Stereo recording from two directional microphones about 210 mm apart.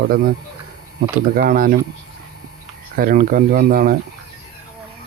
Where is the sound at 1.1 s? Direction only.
40° right (ahead or behind).